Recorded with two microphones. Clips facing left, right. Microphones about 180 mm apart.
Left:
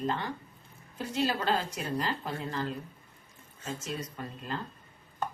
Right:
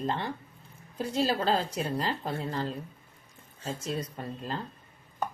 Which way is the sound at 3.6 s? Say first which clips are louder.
Right 3 dB; 35° right (ahead or behind).